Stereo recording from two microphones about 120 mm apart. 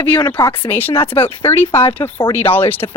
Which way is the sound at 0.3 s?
30° left (ahead or behind).